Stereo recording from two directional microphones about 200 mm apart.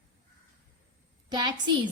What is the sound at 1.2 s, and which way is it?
Speech, 20° right (ahead or behind).